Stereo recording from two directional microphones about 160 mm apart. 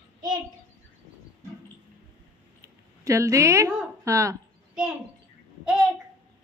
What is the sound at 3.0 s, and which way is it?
A woman's voice, 20° right (ahead or behind).